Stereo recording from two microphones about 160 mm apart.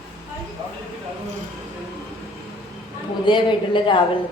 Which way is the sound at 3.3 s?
30° left (ahead or behind).